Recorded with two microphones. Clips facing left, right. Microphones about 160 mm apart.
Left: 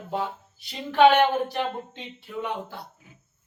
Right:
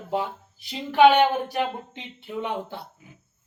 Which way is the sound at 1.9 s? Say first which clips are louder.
Right 2 dB; 25° right (ahead or behind).